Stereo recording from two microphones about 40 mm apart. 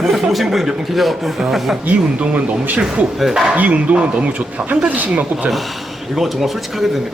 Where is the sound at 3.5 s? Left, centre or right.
Right.